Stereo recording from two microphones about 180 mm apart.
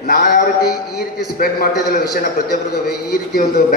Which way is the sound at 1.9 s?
55° left (ahead or behind).